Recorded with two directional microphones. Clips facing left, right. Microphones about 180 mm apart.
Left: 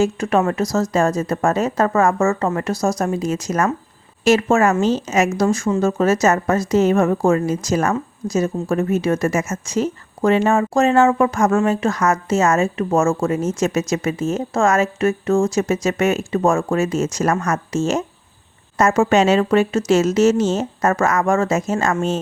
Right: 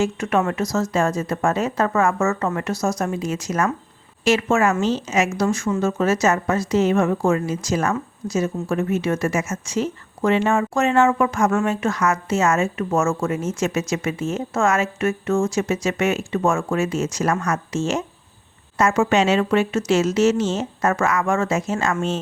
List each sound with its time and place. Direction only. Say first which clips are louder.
0.0 s a woman's voice: left 3 dB; 35° left (ahead or behind)